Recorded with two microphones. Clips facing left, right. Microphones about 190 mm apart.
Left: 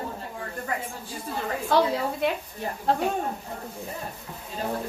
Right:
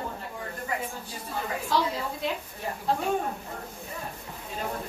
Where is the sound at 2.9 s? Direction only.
65° left (ahead or behind).